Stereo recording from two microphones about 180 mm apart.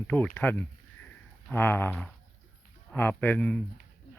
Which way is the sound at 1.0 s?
10° left (ahead or behind).